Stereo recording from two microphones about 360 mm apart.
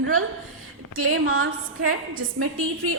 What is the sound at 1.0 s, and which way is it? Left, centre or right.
A woman's voice, right.